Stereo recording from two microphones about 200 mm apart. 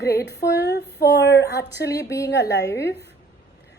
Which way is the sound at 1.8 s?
15° left (ahead or behind).